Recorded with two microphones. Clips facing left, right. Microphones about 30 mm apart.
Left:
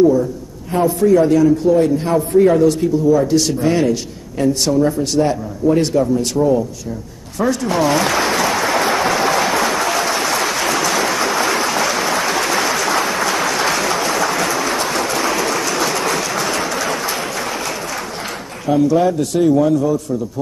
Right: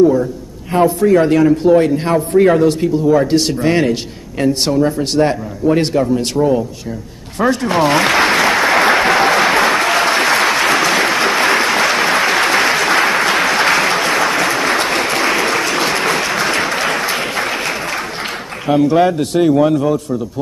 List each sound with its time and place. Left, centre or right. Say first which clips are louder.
0.7 s a man's voice: right 2 dB; right
1.9 s a man's voice: right 1 dB; right
4.7 s speech: right 1 dB; right
5.1 s a man's voice: right 2 dB; right
7.9 s applause: right 4 dB; right
14.7 s applause: right 3 dB; right
18.7 s a man's voice: right 2 dB; right